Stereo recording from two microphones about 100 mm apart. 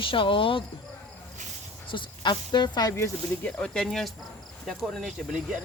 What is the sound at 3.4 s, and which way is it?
Speech, 10° left (ahead or behind).